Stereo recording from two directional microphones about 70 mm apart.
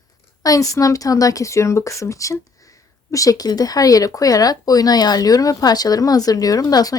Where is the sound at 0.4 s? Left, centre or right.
Left.